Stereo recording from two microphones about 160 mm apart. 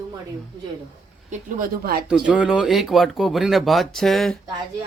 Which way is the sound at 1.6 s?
70° right (ahead or behind).